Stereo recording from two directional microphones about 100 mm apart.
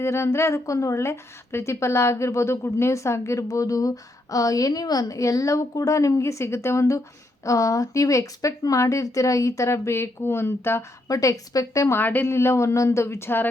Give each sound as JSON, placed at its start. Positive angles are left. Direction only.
{"t": 0.0, "sound": "a woman's voice", "side_deg": 25}
{"t": 11.1, "sound": "a woman's voice", "side_deg": 35}